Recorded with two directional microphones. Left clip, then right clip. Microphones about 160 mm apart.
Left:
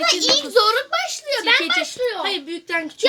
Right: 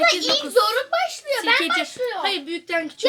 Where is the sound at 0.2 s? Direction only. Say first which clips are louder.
Left 2 dB; 65° left (ahead or behind).